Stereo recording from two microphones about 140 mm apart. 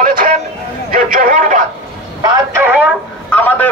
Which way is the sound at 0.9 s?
90° right.